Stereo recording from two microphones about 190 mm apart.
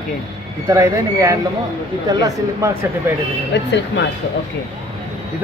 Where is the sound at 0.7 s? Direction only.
15° right (ahead or behind).